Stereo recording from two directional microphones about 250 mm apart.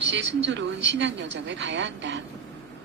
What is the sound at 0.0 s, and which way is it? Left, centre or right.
A woman's voice, right.